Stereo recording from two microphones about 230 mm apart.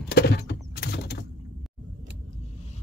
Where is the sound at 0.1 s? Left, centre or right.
Left.